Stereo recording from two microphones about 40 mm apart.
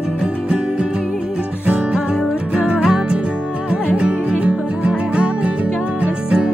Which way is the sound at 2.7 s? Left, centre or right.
Centre.